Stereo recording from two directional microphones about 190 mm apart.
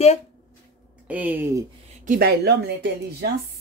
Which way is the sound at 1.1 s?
10° right (ahead or behind).